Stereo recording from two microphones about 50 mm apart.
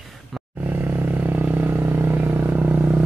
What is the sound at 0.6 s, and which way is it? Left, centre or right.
Vehicle, right.